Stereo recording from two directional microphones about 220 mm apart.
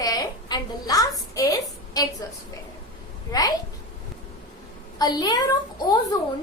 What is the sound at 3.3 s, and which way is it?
Speech, 15° left (ahead or behind).